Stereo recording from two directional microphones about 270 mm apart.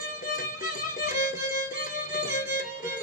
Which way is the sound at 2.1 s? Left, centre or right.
Left.